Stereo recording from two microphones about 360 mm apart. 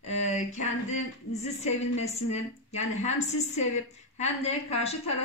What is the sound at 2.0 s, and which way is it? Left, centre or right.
A woman's voice, centre.